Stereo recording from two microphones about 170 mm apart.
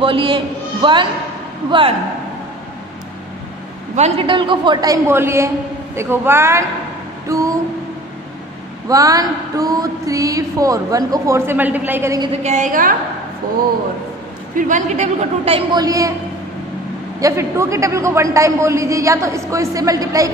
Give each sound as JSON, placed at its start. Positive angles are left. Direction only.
{"t": 0.0, "sound": "a man's voice", "side_deg": -30}
{"t": 3.9, "sound": "a man's voice", "side_deg": -40}
{"t": 4.3, "sound": "a sound", "side_deg": -30}
{"t": 5.9, "sound": "a man's voice", "side_deg": -15}
{"t": 8.8, "sound": "a sound", "side_deg": -20}
{"t": 12.3, "sound": "a woman's voice", "side_deg": -45}
{"t": 14.5, "sound": "a woman's voice", "side_deg": -50}
{"t": 15.8, "sound": "a sound", "side_deg": -20}
{"t": 17.2, "sound": "a man's voice", "side_deg": -15}